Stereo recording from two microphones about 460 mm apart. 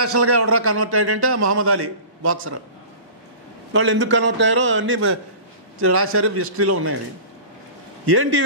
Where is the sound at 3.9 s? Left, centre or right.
Right.